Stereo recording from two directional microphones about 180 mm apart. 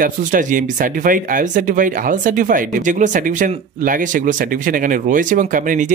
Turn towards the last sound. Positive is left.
turn(degrees=-45)  # may be behind; listen again after turning